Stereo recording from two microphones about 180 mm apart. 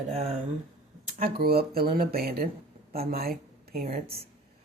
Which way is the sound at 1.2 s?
60° right (ahead or behind).